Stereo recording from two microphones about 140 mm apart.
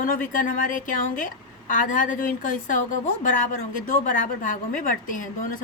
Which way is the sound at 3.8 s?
70° left (ahead or behind).